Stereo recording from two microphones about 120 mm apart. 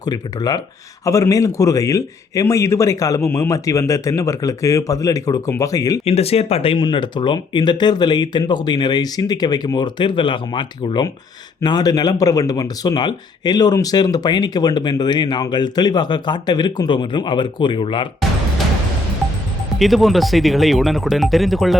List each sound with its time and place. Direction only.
0.0 s a man's voice: 35° left (ahead or behind)
6.1 s speech: 55° left (ahead or behind)
19.8 s speech: centre (ahead or behind)